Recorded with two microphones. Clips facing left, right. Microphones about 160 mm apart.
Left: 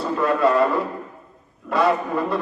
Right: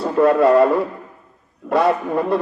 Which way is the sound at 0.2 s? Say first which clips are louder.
Right 6 dB; 60° right (ahead or behind).